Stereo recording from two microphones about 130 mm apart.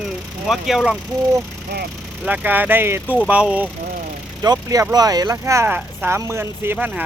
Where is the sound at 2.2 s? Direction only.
10° right (ahead or behind).